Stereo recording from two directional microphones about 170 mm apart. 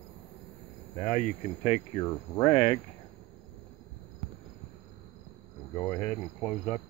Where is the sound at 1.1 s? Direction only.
40° left (ahead or behind).